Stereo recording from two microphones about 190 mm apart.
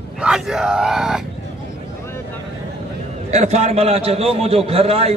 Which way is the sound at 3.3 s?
35° right (ahead or behind).